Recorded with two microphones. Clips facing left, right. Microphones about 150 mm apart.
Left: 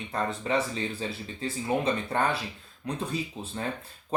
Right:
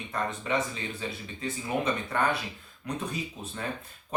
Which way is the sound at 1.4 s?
30° left (ahead or behind).